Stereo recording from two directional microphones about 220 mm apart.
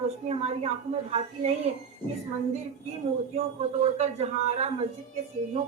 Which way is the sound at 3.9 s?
30° right (ahead or behind).